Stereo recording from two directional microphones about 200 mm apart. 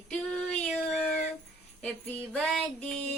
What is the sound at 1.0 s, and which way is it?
Music, 45° left (ahead or behind).